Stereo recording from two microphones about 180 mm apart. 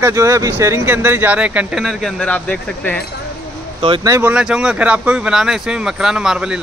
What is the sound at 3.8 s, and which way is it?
Speech, 30° right (ahead or behind).